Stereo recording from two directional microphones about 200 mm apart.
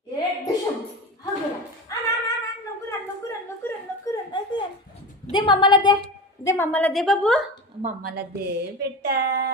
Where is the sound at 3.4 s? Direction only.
15° left (ahead or behind).